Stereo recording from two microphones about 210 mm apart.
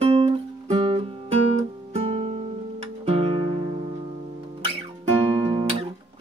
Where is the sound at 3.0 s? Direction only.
25° right (ahead or behind).